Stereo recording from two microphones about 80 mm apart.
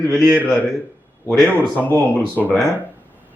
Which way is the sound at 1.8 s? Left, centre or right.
Left.